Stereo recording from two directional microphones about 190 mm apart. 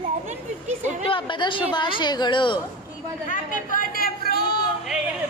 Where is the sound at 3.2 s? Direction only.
45° left (ahead or behind).